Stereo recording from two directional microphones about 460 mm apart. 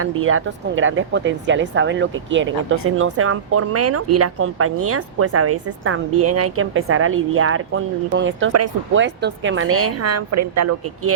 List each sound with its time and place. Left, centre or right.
0.0 s speech: right